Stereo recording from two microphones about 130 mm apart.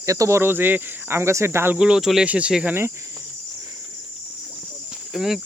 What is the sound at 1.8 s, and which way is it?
Speech, 5° right (ahead or behind).